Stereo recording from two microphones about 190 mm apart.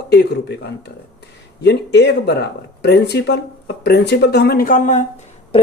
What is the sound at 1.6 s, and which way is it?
Speech, 60° left (ahead or behind).